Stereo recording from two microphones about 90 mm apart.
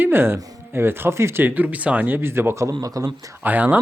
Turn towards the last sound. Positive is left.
turn(degrees=-20)  # may be behind; listen again after turning